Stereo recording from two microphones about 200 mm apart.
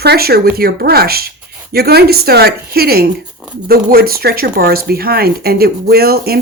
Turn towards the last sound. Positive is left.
turn(degrees=-50)  # may be behind; listen again after turning